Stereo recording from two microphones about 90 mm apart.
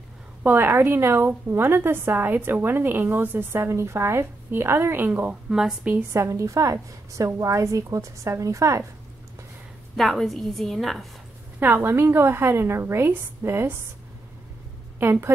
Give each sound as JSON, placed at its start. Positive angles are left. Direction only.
{"t": 0.4, "sound": "a woman's voice", "side_deg": -20}
{"t": 5.5, "sound": "a woman's voice", "side_deg": -5}
{"t": 6.1, "sound": "a woman's voice", "side_deg": -35}
{"t": 9.9, "sound": "a woman's voice", "side_deg": 0}
{"t": 11.6, "sound": "a woman's voice", "side_deg": -25}
{"t": 15.0, "sound": "a woman's voice", "side_deg": -25}